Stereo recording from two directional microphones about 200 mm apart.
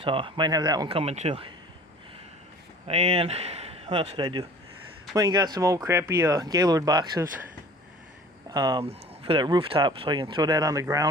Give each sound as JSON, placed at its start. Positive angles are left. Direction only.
{"t": 0.0, "sound": "speech", "side_deg": -25}
{"t": 2.8, "sound": "speech", "side_deg": -30}
{"t": 8.4, "sound": "speech", "side_deg": -20}